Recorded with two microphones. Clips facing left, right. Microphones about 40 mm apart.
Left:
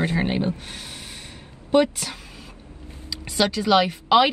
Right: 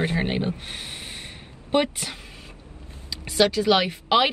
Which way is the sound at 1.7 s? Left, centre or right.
Right.